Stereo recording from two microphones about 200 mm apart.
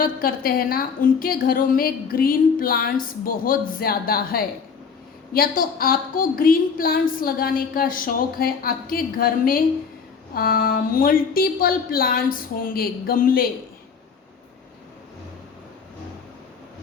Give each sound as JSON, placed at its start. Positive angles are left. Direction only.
{"t": 0.0, "sound": "a woman's voice", "side_deg": 45}